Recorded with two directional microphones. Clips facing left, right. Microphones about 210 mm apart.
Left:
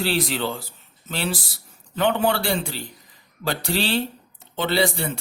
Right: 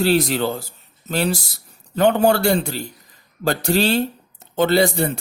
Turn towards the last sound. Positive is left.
turn(degrees=-45)  # may be behind; listen again after turning